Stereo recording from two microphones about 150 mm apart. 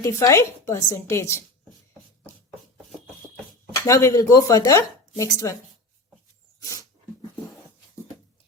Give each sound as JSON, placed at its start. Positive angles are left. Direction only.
{"t": 0.0, "sound": "speech", "side_deg": 20}
{"t": 3.8, "sound": "speech", "side_deg": 20}
{"t": 6.7, "sound": "dog", "side_deg": 25}